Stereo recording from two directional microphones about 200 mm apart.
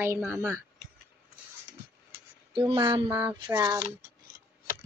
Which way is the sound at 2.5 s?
25° right (ahead or behind).